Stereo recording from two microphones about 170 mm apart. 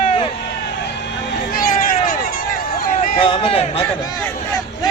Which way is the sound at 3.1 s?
30° left (ahead or behind).